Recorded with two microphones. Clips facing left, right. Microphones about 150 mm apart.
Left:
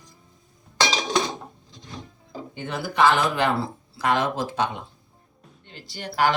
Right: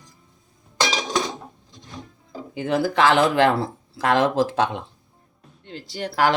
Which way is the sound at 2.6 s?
90° right.